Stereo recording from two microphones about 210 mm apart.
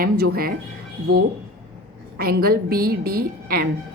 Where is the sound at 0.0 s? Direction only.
45° right (ahead or behind).